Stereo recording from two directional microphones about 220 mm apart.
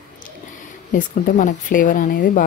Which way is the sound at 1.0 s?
35° left (ahead or behind).